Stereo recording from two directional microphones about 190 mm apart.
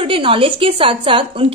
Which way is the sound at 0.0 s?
30° right (ahead or behind).